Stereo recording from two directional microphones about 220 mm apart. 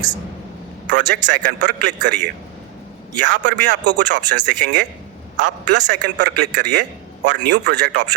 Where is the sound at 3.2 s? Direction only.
50° right (ahead or behind).